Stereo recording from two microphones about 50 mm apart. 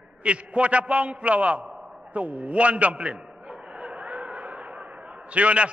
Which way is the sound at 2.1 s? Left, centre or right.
Right.